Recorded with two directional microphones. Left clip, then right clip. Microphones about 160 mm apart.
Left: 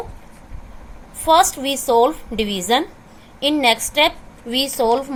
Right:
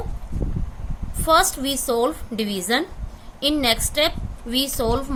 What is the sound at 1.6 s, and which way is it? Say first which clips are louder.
Speech: left 3 dB; 5° left (ahead or behind).